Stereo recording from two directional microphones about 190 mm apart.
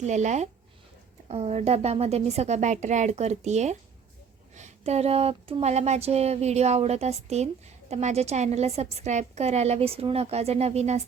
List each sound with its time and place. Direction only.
0.0 s a woman's voice: 40° right (ahead or behind)